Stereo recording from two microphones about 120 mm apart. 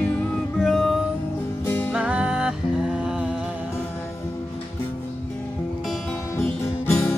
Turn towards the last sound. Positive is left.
turn(degrees=20)  # may be behind; listen again after turning